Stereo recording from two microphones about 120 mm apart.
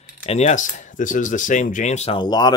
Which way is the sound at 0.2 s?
75° left (ahead or behind).